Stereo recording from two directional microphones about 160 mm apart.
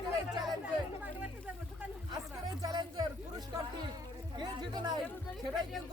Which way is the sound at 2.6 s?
25° right (ahead or behind).